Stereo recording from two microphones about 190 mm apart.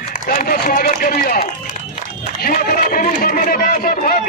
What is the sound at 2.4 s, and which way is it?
Speech, 45° left (ahead or behind).